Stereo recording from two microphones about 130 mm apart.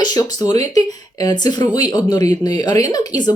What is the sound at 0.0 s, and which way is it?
Speech, 30° left (ahead or behind).